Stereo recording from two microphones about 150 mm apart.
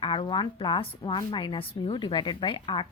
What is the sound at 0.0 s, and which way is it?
Speech, 35° left (ahead or behind).